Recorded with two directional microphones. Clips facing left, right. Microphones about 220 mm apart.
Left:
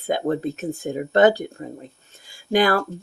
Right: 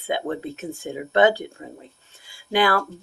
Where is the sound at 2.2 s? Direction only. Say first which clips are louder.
Left 2 dB; 45° left (ahead or behind).